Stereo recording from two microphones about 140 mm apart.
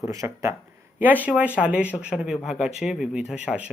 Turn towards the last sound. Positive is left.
turn(degrees=-5)  # may be behind; listen again after turning